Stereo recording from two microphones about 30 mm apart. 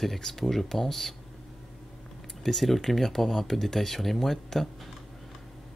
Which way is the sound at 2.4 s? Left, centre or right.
Centre.